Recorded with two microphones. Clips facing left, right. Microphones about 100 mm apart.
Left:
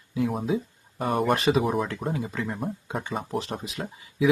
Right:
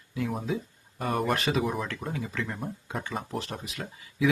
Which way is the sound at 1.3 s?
25° left (ahead or behind).